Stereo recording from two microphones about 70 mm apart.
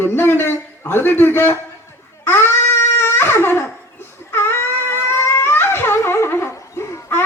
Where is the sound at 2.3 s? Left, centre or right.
Left.